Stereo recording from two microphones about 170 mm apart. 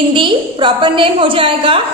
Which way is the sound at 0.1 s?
30° right (ahead or behind).